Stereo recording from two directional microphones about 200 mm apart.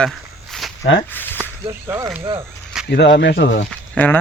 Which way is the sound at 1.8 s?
10° right (ahead or behind).